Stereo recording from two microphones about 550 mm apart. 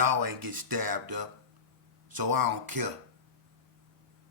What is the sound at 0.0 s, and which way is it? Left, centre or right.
A man's voice, right.